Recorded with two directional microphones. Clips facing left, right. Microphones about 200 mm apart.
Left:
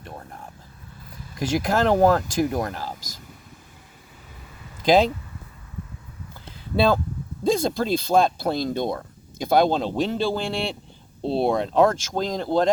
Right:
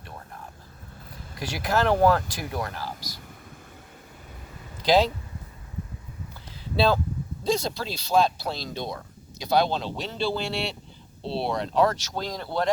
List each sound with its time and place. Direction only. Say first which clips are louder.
1.4 s speech: left 4 dB; 45° left (ahead or behind)
4.8 s speech: left 3 dB; 50° left (ahead or behind)
6.7 s speech: left 3 dB; 50° left (ahead or behind)